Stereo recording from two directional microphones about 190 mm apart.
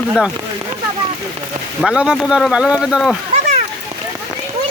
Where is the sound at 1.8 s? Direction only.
5° right (ahead or behind).